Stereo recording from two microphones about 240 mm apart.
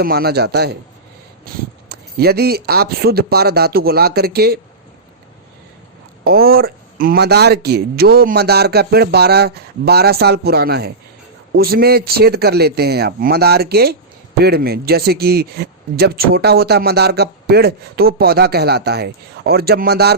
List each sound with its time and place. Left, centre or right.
0.0 s speech: right
6.2 s speech: right